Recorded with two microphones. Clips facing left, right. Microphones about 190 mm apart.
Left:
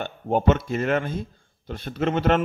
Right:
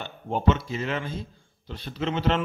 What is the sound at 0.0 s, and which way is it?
Speech, 55° left (ahead or behind).